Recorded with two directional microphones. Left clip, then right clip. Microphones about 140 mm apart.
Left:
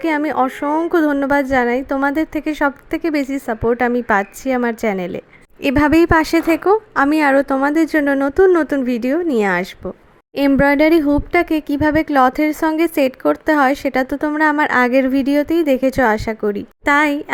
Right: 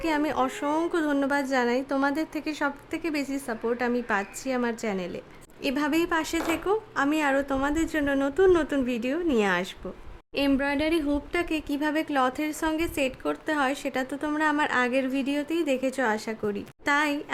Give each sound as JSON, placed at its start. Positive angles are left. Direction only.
{"t": 0.0, "sound": "a woman's voice", "side_deg": 35}
{"t": 0.9, "sound": "a woman's voice", "side_deg": 35}
{"t": 10.6, "sound": "a woman's voice", "side_deg": 50}
{"t": 14.3, "sound": "a woman's voice", "side_deg": 30}